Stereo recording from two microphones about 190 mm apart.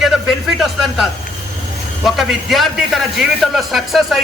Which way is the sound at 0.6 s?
Centre (ahead or behind).